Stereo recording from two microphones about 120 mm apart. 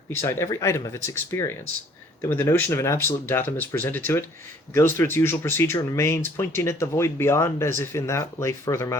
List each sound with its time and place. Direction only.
0.2 s speech: 20° left (ahead or behind)